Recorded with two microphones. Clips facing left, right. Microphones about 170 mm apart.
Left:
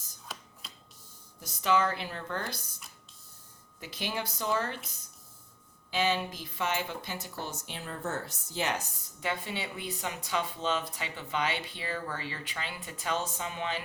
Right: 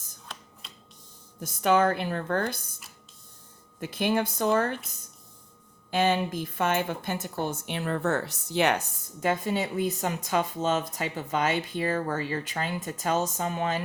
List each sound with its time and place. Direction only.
0.3 s a sound: 5° left (ahead or behind)
1.4 s speech: 55° right (ahead or behind)
5.9 s speech: 50° right (ahead or behind)